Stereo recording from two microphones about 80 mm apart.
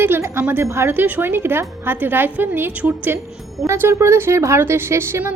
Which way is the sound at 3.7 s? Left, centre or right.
Right.